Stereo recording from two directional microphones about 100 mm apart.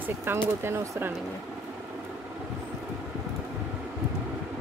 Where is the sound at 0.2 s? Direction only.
25° right (ahead or behind).